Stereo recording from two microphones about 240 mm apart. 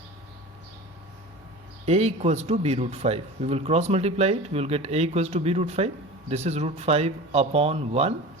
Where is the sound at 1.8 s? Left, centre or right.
Right.